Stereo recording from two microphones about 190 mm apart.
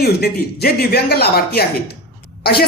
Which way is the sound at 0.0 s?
55° left (ahead or behind).